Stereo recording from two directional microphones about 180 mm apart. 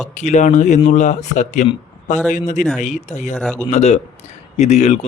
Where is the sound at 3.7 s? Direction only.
40° left (ahead or behind).